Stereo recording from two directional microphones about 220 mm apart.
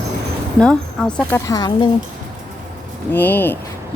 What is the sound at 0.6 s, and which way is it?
Speech, 5° left (ahead or behind).